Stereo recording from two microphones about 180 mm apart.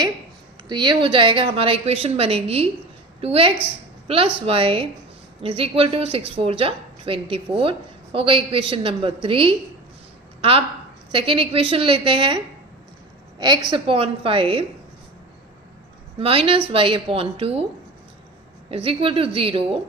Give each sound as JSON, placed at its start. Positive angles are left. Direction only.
{"t": 0.7, "sound": "a woman's voice", "side_deg": -25}
{"t": 11.1, "sound": "a woman's voice", "side_deg": -30}
{"t": 13.7, "sound": "a woman's voice", "side_deg": -30}
{"t": 16.1, "sound": "a woman's voice", "side_deg": -30}
{"t": 18.7, "sound": "a woman's voice", "side_deg": -30}